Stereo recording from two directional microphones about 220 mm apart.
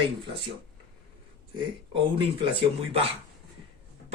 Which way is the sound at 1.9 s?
25° right (ahead or behind).